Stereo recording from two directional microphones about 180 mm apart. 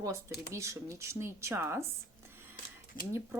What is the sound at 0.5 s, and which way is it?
Speech, 15° right (ahead or behind).